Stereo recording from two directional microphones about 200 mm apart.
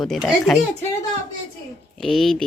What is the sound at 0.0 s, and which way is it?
Speech, centre (ahead or behind).